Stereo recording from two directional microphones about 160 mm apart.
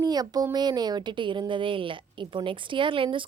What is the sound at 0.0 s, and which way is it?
A woman's voice, 25° right (ahead or behind).